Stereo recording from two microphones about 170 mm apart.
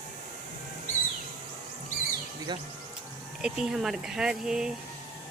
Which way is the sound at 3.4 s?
5° right (ahead or behind).